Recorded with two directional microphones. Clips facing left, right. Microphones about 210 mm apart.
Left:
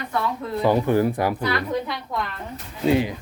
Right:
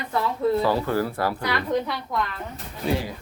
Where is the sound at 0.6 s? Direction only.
20° left (ahead or behind).